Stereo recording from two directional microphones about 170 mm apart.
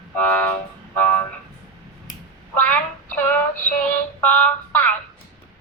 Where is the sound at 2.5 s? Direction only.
10° left (ahead or behind).